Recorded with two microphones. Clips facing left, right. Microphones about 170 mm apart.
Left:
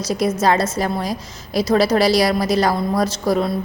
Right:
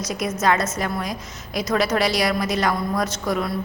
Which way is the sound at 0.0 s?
30° left (ahead or behind).